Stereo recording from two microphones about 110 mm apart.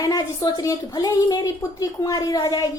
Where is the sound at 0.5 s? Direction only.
30° left (ahead or behind).